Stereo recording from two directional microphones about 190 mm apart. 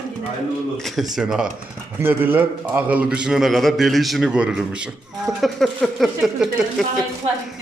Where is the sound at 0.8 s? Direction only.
Centre (ahead or behind).